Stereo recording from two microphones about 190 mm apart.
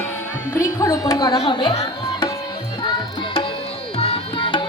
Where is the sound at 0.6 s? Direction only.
15° left (ahead or behind).